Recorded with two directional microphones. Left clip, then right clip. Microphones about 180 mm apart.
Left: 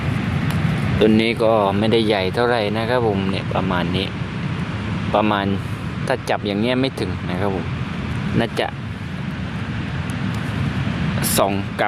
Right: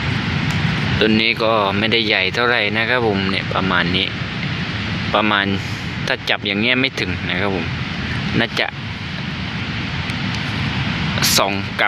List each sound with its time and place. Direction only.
0.9 s speech: 15° left (ahead or behind); by 4.1 s centre (ahead or behind)
5.1 s speech: centre (ahead or behind)
11.2 s speech: 10° left (ahead or behind)